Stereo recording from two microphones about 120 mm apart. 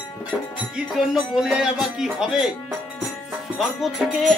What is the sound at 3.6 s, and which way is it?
Music, centre (ahead or behind).